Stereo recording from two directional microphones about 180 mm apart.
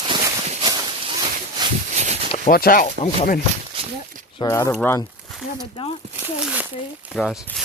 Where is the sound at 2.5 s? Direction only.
55° left (ahead or behind).